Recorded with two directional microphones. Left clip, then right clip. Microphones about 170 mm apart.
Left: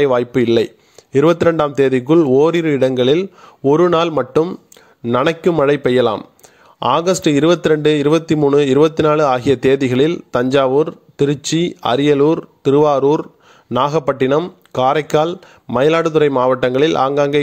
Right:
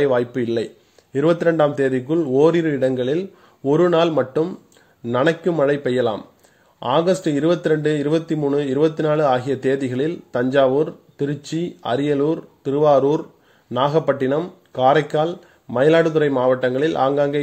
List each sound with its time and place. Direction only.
0.0 s a man's voice: 35° left (ahead or behind)